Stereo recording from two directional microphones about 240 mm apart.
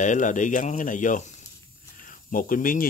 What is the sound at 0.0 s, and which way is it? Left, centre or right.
Speech, left.